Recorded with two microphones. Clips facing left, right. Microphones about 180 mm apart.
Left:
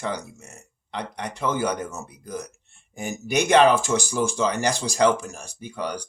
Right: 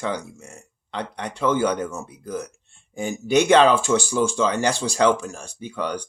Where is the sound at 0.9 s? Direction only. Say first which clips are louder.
Right 2 dB; 15° left (ahead or behind).